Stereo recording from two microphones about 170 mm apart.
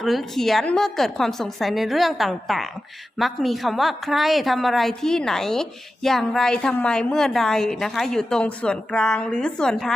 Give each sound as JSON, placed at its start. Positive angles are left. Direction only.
{"t": 0.0, "sound": "a woman's voice", "side_deg": 0}